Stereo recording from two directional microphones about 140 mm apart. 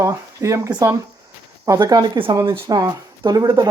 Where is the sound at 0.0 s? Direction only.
20° right (ahead or behind).